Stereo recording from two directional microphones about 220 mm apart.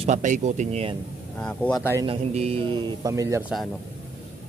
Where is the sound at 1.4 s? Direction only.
5° left (ahead or behind).